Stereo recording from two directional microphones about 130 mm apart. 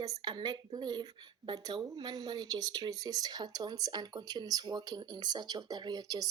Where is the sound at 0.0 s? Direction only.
35° right (ahead or behind).